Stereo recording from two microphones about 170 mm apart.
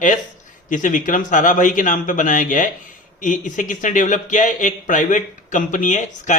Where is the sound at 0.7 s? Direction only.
50° left (ahead or behind).